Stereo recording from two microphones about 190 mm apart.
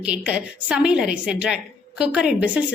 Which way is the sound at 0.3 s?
5° right (ahead or behind).